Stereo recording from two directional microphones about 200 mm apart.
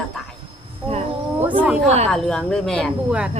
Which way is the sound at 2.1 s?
5° left (ahead or behind).